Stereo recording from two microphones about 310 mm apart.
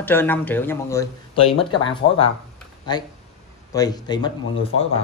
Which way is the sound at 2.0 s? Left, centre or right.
Left.